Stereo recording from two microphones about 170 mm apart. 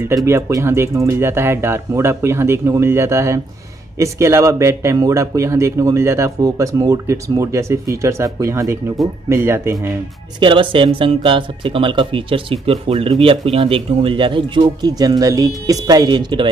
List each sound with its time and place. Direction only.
0.1 s speech: 20° right (ahead or behind)
10.4 s speech: 30° right (ahead or behind)